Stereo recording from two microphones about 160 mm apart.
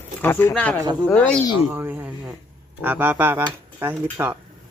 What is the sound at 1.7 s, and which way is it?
Speech, 15° right (ahead or behind).